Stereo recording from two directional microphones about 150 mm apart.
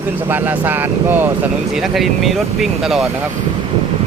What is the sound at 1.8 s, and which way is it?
Speech, centre (ahead or behind).